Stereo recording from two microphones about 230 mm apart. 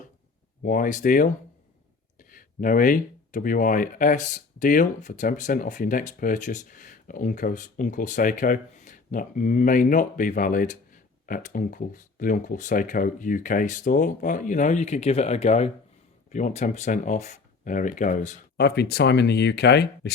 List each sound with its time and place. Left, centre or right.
0.6 s speech: left
18.5 s speech: left